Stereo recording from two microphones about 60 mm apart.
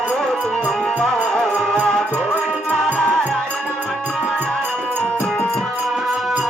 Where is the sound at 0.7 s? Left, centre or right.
Centre.